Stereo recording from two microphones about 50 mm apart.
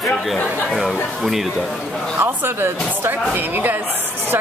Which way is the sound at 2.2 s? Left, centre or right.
Right.